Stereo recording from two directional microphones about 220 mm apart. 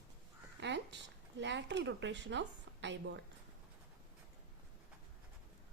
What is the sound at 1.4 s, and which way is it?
A woman's voice, 50° right (ahead or behind).